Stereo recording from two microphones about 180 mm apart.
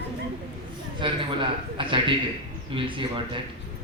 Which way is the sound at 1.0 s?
25° right (ahead or behind).